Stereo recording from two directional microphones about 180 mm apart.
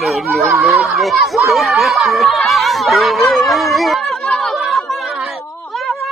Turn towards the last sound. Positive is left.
turn(degrees=0)  # may be behind; listen again after turning